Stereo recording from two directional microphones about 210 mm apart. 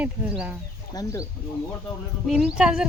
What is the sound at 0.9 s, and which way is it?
Speech, 15° left (ahead or behind).